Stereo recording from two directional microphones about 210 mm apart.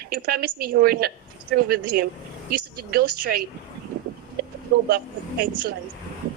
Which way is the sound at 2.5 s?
45° right (ahead or behind).